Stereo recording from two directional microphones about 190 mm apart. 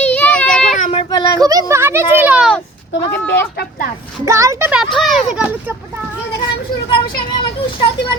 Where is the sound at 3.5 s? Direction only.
55° left (ahead or behind).